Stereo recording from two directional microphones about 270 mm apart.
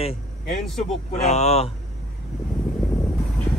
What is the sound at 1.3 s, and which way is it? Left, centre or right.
Speech, left.